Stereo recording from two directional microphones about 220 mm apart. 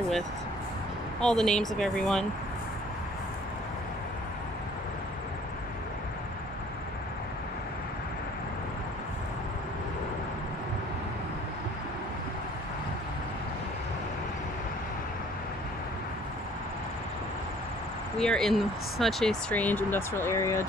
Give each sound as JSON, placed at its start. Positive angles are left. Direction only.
{"t": 1.2, "sound": "speech", "side_deg": 5}
{"t": 18.2, "sound": "speech", "side_deg": 0}